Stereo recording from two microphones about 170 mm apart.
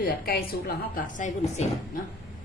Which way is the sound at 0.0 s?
60° left (ahead or behind).